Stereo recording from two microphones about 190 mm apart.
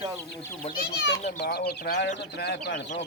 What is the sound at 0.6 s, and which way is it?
Speech, 50° left (ahead or behind).